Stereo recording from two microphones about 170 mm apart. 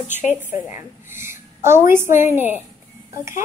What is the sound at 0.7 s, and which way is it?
A woman's voice, 15° right (ahead or behind).